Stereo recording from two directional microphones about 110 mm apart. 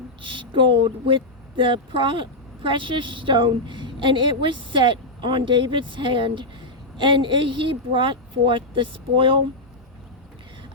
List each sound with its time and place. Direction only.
0.2 s a woman's voice: 50° right (ahead or behind)